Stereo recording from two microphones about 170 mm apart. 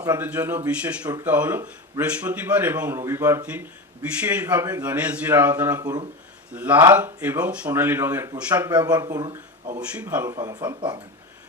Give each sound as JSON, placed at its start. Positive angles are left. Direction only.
{"t": 0.2, "sound": "a man's voice", "side_deg": -10}
{"t": 5.8, "sound": "speech", "side_deg": -20}
{"t": 6.5, "sound": "a man's voice", "side_deg": -10}
{"t": 9.8, "sound": "a man's voice", "side_deg": -10}
{"t": 10.2, "sound": "speech", "side_deg": -20}